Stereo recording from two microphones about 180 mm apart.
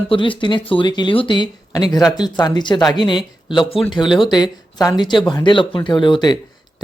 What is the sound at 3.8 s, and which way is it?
Speech, centre (ahead or behind).